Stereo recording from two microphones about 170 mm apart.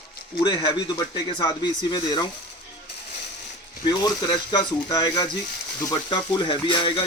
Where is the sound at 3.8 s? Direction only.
25° left (ahead or behind).